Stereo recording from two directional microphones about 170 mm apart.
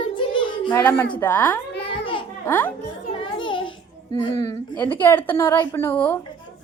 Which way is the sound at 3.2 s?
30° left (ahead or behind).